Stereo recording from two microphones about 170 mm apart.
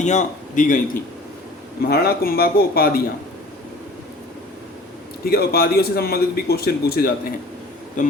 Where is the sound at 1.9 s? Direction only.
65° left (ahead or behind).